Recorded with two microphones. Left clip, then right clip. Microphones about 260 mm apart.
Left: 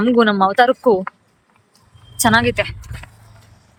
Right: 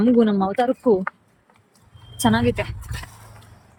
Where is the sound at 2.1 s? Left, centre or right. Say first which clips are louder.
Left 6 dB; centre.